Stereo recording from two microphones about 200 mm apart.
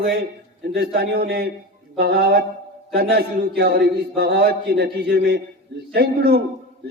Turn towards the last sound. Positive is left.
turn(degrees=-50)  # may be behind; listen again after turning